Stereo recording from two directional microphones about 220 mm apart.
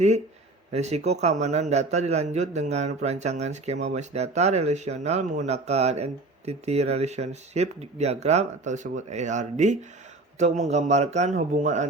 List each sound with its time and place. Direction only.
0.7 s a man's voice: 30° right (ahead or behind)